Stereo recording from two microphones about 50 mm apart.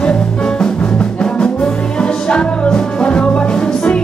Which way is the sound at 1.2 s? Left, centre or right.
Centre.